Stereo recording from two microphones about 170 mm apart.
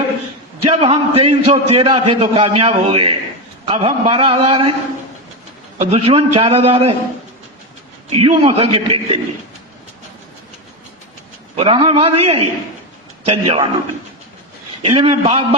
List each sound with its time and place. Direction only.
0.7 s a man's voice: 35° right (ahead or behind)
5.8 s a man's voice: 35° right (ahead or behind)
8.1 s a man's voice: 35° right (ahead or behind)
11.5 s a man's voice: 35° right (ahead or behind)
14.8 s a man's voice: 35° right (ahead or behind)